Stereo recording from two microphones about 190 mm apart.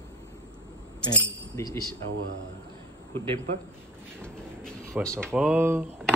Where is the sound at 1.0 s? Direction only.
20° left (ahead or behind).